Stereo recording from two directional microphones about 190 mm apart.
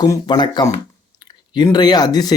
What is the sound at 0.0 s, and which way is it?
Speech, 20° left (ahead or behind).